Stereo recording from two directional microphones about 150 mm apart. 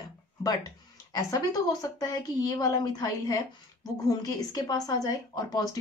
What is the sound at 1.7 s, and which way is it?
Speech, 25° left (ahead or behind).